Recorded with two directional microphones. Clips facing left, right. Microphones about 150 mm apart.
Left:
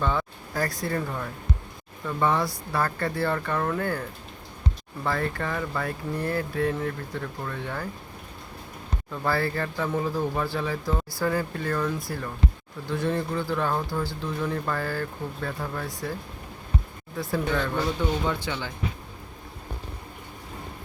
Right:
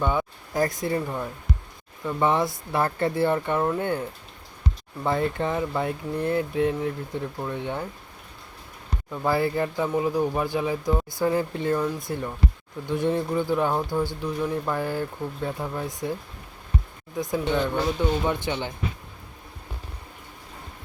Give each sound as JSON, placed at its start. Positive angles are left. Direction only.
{"t": 0.0, "sound": "speech", "side_deg": -15}
{"t": 5.0, "sound": "speech", "side_deg": -20}
{"t": 9.2, "sound": "speech", "side_deg": -15}
{"t": 17.2, "sound": "speech", "side_deg": -20}